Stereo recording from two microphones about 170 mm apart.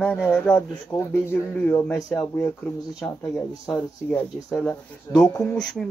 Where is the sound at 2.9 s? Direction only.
Centre (ahead or behind).